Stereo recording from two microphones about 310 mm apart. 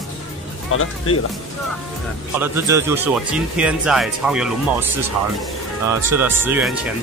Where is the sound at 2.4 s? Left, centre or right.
Centre.